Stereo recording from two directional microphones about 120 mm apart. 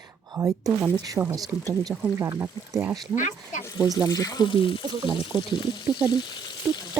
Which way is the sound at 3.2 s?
90° left.